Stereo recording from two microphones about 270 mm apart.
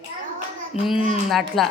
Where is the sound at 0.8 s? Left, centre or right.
Left.